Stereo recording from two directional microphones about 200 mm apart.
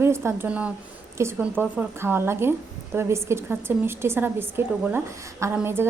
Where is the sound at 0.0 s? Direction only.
10° right (ahead or behind).